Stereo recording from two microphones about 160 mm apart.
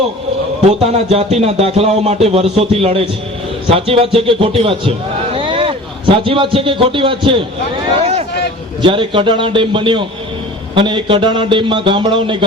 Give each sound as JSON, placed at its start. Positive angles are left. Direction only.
{"t": 0.7, "sound": "a man's voice", "side_deg": -40}
{"t": 8.8, "sound": "speech", "side_deg": -30}